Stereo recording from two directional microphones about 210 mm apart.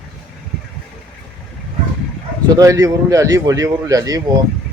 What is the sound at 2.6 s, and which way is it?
A man's voice, 15° right (ahead or behind).